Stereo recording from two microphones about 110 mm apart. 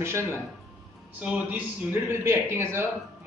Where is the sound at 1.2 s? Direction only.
15° right (ahead or behind).